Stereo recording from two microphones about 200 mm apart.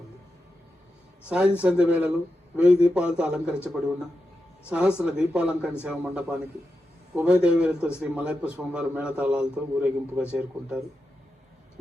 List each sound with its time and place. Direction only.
1.3 s a man's voice: 5° right (ahead or behind)